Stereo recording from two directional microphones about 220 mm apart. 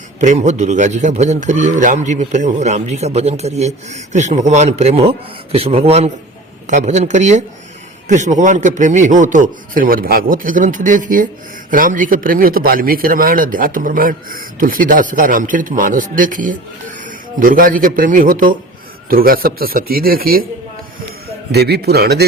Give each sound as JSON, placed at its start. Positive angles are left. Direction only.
{"t": 0.2, "sound": "a man's voice", "side_deg": -30}
{"t": 21.5, "sound": "a man's voice", "side_deg": -45}